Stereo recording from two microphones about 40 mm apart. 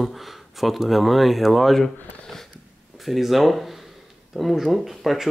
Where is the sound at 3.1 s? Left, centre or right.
Centre.